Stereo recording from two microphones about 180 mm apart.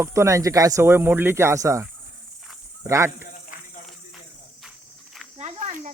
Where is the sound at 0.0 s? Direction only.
15° right (ahead or behind).